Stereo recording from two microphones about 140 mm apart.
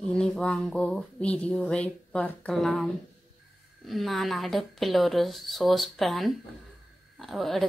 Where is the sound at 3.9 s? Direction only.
Centre (ahead or behind).